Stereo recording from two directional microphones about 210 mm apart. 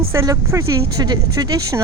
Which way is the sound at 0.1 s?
15° right (ahead or behind).